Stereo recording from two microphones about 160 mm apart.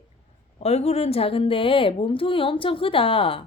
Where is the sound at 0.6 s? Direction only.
40° left (ahead or behind).